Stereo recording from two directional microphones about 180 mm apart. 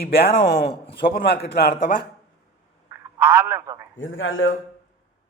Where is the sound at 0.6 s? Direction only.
30° left (ahead or behind).